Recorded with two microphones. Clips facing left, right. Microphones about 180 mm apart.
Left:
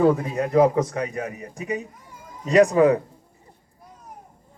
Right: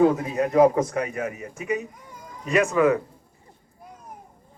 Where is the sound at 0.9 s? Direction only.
30° left (ahead or behind).